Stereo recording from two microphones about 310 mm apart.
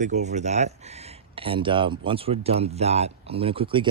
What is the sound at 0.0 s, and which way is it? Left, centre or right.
Speech, right.